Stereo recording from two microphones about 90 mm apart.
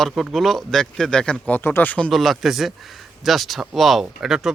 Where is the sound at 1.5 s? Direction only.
25° left (ahead or behind).